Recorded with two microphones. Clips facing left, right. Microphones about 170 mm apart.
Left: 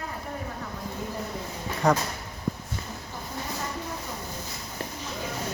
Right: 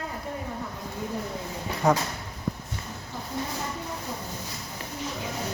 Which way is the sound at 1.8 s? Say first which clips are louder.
Even; 5° right (ahead or behind).